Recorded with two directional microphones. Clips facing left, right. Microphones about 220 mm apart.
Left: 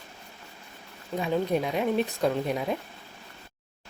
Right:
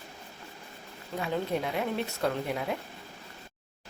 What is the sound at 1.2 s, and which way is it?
Speech, 15° left (ahead or behind).